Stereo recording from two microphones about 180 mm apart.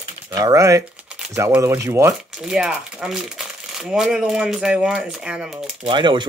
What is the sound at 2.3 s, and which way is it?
Speech, 5° right (ahead or behind).